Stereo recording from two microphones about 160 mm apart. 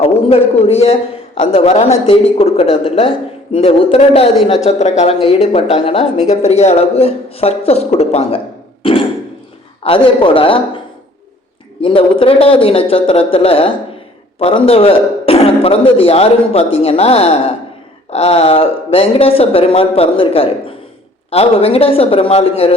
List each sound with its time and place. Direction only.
0.0 s speech: 40° left (ahead or behind)
8.8 s a sound: 35° left (ahead or behind)
9.8 s speech: 35° left (ahead or behind)
11.8 s speech: 35° left (ahead or behind)